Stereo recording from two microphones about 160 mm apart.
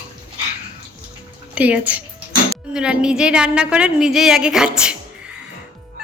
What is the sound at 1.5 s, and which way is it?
A woman's voice, 10° right (ahead or behind).